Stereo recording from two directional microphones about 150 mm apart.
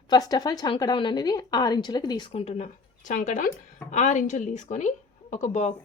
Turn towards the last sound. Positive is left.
turn(degrees=50)  # may be behind; listen again after turning